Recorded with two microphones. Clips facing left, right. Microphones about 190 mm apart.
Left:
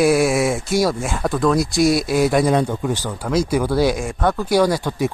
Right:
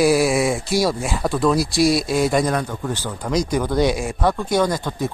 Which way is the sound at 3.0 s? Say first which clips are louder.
Even; 5° left (ahead or behind).